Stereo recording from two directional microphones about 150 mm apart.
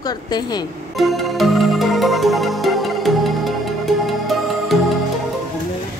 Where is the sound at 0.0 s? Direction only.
25° left (ahead or behind).